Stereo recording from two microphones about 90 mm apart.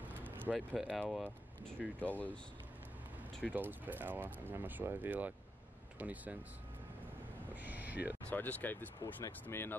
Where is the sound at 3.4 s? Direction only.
20° right (ahead or behind).